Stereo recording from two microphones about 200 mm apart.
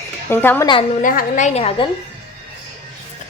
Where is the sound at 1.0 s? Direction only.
40° left (ahead or behind).